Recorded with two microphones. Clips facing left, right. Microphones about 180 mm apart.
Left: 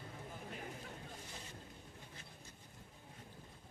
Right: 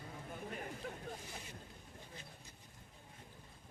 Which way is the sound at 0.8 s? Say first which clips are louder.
Right 6 dB; 60° right (ahead or behind).